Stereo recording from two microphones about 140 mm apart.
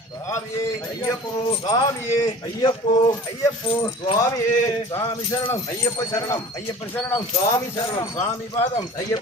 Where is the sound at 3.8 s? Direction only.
35° left (ahead or behind).